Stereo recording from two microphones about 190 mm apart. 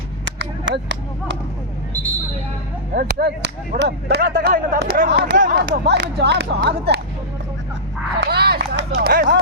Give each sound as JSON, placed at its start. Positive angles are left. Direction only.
{"t": 0.3, "sound": "speech", "side_deg": -65}
{"t": 2.9, "sound": "speech", "side_deg": -55}
{"t": 5.4, "sound": "speech", "side_deg": -45}
{"t": 8.2, "sound": "a sound", "side_deg": -60}
{"t": 9.0, "sound": "speech", "side_deg": -50}